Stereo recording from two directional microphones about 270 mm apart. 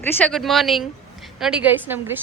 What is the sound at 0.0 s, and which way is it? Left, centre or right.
A woman's voice, centre.